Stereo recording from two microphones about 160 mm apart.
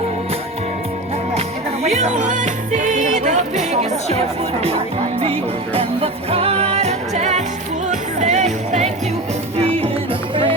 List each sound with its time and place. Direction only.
1.8 s music: 45° right (ahead or behind)
5.2 s music: 35° right (ahead or behind)